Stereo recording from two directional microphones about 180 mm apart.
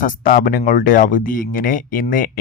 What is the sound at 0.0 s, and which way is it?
Speech, 50° left (ahead or behind).